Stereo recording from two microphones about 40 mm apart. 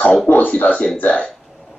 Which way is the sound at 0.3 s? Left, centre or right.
Left.